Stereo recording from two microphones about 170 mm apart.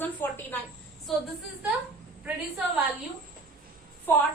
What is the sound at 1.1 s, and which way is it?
Speech, centre (ahead or behind).